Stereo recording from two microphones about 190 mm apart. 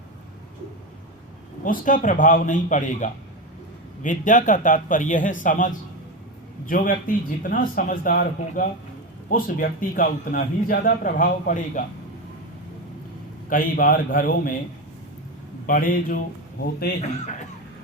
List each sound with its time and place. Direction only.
1.6 s a man's voice: 45° left (ahead or behind)
13.5 s a man's voice: 50° left (ahead or behind)
15.6 s a man's voice: 45° left (ahead or behind)